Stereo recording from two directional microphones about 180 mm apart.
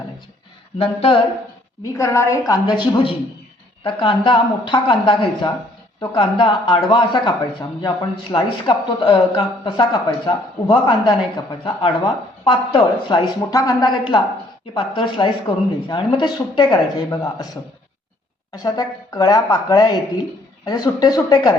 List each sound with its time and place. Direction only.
0.8 s speech: 30° left (ahead or behind)
1.8 s a woman's voice: 15° left (ahead or behind)